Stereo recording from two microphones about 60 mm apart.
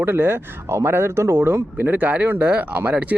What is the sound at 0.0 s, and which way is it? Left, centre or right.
Speech, right.